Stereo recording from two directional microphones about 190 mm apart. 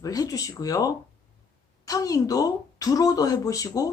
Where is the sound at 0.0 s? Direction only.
20° left (ahead or behind).